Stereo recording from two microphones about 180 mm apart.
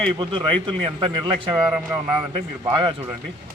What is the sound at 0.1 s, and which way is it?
A man's voice, 25° right (ahead or behind).